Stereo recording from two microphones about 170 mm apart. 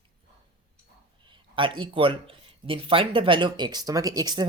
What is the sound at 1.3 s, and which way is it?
Speech, 30° right (ahead or behind).